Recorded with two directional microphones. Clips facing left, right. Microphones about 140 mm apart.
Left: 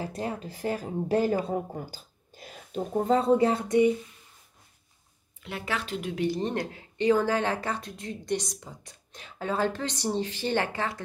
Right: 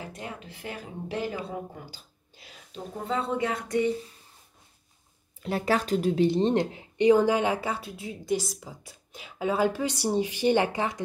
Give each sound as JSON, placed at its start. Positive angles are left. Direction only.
{"t": 0.0, "sound": "a woman's voice", "side_deg": 35}
{"t": 3.6, "sound": "speech", "side_deg": 20}
{"t": 5.4, "sound": "speech", "side_deg": -40}